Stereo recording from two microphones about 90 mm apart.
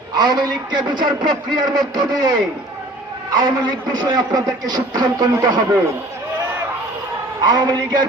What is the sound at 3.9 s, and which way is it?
A man's voice, 45° right (ahead or behind).